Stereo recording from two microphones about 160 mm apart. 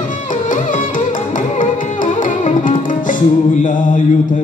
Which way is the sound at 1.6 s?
55° left (ahead or behind).